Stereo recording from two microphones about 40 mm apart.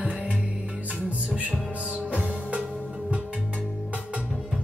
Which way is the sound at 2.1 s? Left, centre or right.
Left.